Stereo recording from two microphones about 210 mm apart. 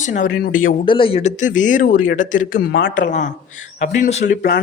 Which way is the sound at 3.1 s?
35° left (ahead or behind).